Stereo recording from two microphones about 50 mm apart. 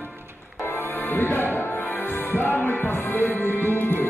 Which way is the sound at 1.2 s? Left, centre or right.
Left.